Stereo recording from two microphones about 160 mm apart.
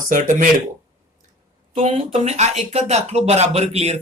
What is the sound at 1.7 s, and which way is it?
Speech, 40° right (ahead or behind).